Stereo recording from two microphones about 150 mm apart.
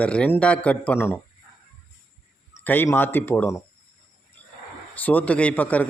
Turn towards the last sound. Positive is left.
turn(degrees=10)  # may be behind; listen again after turning